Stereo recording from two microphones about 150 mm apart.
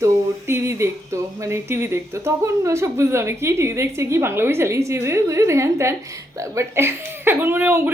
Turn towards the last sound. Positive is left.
turn(degrees=-15)  # may be behind; listen again after turning